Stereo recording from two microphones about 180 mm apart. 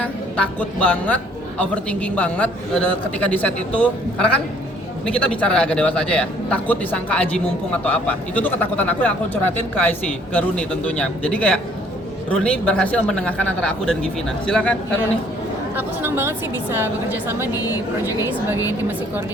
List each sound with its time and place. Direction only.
0.0 s a woman's voice: 10° left (ahead or behind)
15.7 s speech: 10° right (ahead or behind)